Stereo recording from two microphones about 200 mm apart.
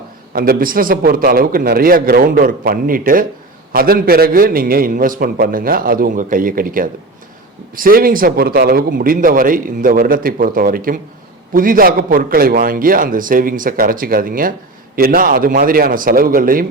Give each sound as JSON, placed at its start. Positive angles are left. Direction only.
{"t": 0.3, "sound": "a man's voice", "side_deg": -45}